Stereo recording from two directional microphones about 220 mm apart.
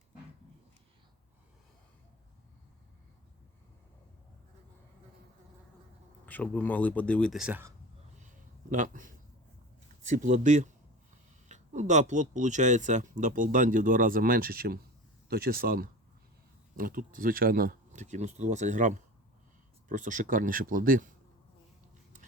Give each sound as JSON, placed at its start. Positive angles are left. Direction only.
{"t": 6.2, "sound": "speech", "side_deg": 5}
{"t": 8.7, "sound": "speech", "side_deg": -35}